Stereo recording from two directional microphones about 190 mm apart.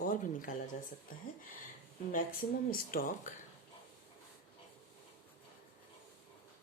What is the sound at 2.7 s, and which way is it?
Speech, 50° left (ahead or behind).